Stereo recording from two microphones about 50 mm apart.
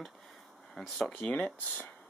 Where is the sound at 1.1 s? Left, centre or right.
Left.